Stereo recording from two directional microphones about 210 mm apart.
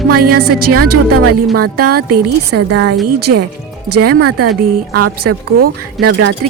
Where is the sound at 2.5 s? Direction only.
65° right (ahead or behind).